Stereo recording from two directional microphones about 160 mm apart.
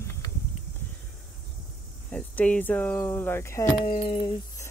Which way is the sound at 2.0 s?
10° left (ahead or behind).